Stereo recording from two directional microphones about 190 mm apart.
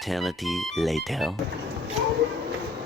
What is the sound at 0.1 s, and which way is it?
Speech, centre (ahead or behind).